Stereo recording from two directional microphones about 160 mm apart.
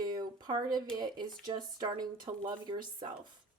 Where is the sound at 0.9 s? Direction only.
25° right (ahead or behind).